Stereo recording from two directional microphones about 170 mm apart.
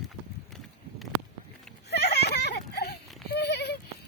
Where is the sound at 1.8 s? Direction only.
75° left (ahead or behind).